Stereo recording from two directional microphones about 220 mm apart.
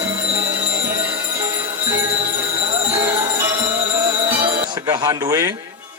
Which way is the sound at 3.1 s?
10° right (ahead or behind).